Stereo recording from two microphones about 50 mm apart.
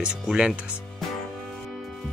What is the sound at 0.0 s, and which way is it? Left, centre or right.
Speech, centre.